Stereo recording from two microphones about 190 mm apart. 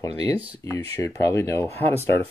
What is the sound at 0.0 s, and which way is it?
Speech, 20° left (ahead or behind).